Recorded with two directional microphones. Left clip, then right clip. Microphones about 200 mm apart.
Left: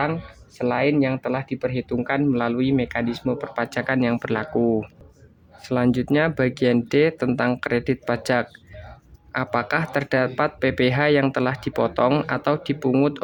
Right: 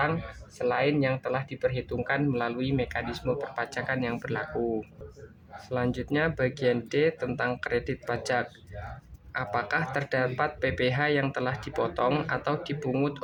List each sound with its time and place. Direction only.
0.6 s speech: 45° left (ahead or behind)
5.6 s speech: 50° left (ahead or behind)